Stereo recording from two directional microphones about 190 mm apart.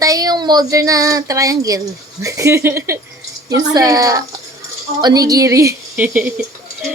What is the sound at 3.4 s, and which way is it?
A woman's voice, 20° right (ahead or behind).